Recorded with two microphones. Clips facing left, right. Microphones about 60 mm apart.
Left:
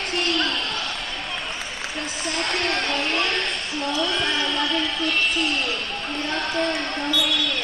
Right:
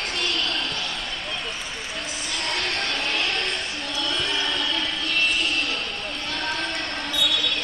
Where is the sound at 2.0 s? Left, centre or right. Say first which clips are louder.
Left 5 dB; left.